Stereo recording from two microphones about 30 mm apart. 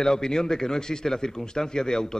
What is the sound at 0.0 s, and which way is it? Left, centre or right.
Speech, left.